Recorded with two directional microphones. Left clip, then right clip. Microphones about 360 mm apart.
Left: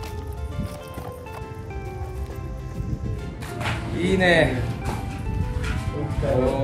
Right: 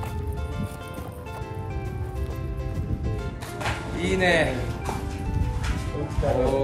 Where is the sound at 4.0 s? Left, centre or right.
Centre.